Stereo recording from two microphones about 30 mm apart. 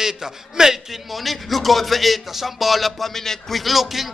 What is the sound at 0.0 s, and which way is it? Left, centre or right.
Speech, centre.